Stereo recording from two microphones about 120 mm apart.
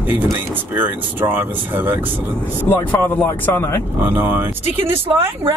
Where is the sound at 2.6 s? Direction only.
15° left (ahead or behind).